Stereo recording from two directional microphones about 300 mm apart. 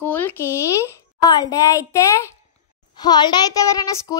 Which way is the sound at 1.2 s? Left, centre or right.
Centre.